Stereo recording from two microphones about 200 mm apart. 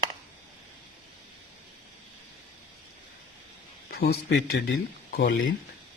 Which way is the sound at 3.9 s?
50° left (ahead or behind).